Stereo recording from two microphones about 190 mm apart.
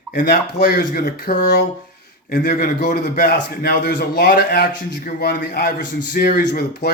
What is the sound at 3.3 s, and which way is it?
A man's voice, 55° left (ahead or behind).